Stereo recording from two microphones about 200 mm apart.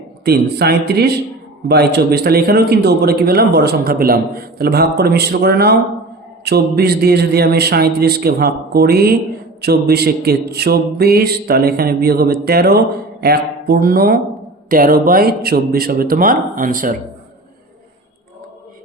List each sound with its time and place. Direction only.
0.3 s a man's voice: 55° right (ahead or behind)